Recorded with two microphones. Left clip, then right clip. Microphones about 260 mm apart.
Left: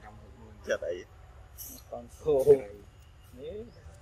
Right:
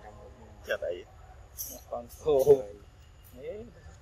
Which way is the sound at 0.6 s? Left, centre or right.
Left.